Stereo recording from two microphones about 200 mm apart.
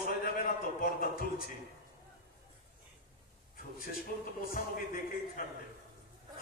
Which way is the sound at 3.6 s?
45° left (ahead or behind).